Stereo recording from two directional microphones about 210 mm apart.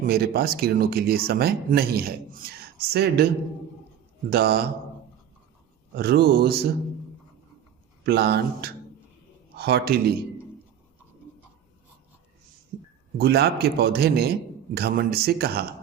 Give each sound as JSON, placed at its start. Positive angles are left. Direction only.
{"t": 0.0, "sound": "speech", "side_deg": -45}
{"t": 4.3, "sound": "speech", "side_deg": -50}
{"t": 6.0, "sound": "speech", "side_deg": -50}
{"t": 8.0, "sound": "speech", "side_deg": -50}
{"t": 13.1, "sound": "speech", "side_deg": -50}